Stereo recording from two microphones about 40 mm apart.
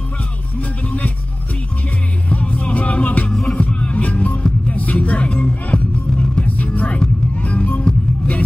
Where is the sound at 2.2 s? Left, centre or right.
Left.